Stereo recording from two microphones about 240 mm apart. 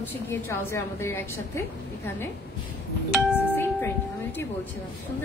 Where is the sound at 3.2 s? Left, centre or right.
Centre.